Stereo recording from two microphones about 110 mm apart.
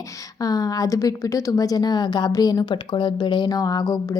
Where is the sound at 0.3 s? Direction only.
35° left (ahead or behind).